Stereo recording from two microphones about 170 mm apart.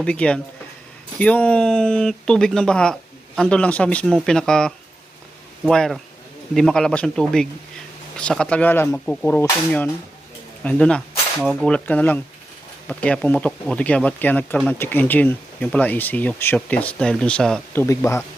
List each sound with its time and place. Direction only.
0.0 s speech: 5° left (ahead or behind)
17.8 s speech: 15° left (ahead or behind)